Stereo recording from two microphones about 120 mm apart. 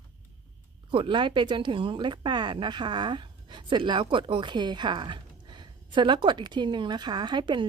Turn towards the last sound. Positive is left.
turn(degrees=-40)  # may be behind; listen again after turning